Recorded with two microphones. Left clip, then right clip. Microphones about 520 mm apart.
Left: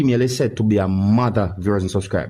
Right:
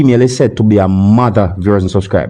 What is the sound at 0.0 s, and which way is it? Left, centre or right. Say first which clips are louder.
Speech: right 9 dB; left.